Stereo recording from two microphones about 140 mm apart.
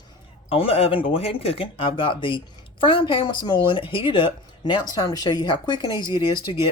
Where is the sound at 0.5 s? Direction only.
45° left (ahead or behind).